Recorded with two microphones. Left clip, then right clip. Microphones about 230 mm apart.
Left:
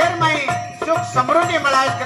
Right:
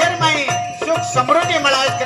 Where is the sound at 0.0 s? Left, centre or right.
Right.